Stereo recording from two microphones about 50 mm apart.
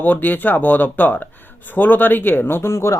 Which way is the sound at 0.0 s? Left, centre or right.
Left.